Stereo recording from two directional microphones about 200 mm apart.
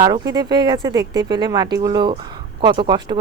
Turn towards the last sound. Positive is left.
turn(degrees=-20)  # may be behind; listen again after turning